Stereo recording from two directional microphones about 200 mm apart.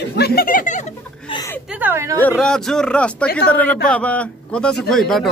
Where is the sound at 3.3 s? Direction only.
50° left (ahead or behind).